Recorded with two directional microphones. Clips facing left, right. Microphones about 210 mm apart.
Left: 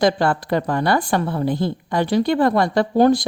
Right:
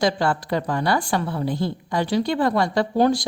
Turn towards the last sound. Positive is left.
turn(degrees=55)  # may be behind; listen again after turning